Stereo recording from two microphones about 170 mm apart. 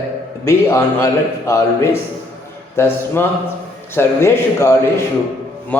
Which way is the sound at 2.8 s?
15° left (ahead or behind).